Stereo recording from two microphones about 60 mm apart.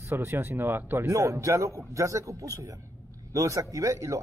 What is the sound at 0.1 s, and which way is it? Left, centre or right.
Speech, right.